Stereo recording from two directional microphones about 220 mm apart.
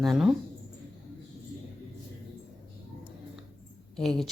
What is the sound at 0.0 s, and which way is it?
Speech, centre (ahead or behind).